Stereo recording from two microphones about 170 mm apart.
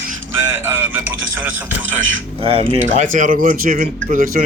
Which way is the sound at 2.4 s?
35° right (ahead or behind).